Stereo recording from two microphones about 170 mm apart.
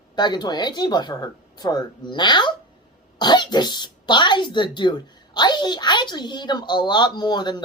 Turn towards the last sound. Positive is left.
turn(degrees=25)  # may be behind; listen again after turning